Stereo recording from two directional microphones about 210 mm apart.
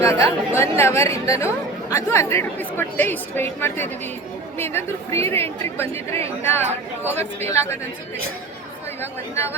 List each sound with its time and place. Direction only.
0.0 s a woman's voice: 15° left (ahead or behind)
9.0 s a woman's voice: 10° left (ahead or behind)